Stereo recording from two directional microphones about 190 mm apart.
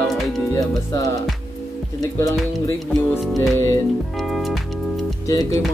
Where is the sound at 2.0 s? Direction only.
15° left (ahead or behind).